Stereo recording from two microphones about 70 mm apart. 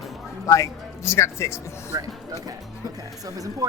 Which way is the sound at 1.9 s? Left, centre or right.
Right.